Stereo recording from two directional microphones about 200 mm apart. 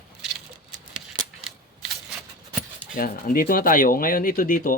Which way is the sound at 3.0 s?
45° left (ahead or behind).